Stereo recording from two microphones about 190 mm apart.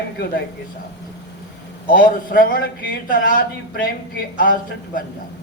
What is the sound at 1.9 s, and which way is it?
A man's voice, 45° left (ahead or behind).